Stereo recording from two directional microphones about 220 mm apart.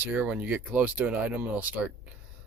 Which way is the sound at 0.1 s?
10° right (ahead or behind).